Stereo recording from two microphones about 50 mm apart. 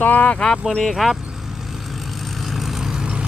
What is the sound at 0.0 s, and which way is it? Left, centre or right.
Speech, left.